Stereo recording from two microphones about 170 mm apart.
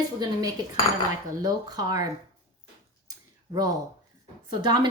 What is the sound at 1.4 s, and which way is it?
Speech, 20° right (ahead or behind).